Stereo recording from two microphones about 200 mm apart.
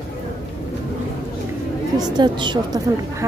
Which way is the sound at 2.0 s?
20° right (ahead or behind).